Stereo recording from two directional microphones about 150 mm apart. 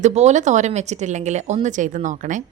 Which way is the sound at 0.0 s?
50° right (ahead or behind).